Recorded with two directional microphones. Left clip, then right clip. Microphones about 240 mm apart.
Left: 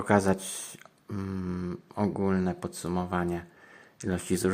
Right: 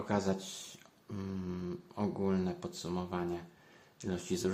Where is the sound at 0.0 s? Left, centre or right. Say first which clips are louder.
Left 10 dB; left.